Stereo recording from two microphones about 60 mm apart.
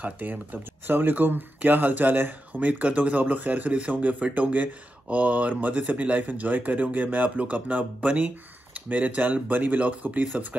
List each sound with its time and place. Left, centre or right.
0.0 s speech: right